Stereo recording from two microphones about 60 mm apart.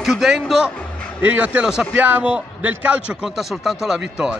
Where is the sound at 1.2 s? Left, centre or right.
Right.